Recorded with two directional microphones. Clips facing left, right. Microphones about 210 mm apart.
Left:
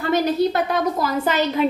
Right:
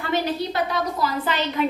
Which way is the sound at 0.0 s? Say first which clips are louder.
Left 6 dB; 45° left (ahead or behind).